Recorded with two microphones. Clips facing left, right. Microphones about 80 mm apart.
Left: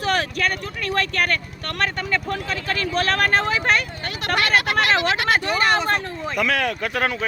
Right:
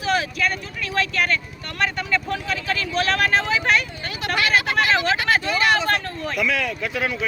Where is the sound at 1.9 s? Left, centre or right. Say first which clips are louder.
Even; left.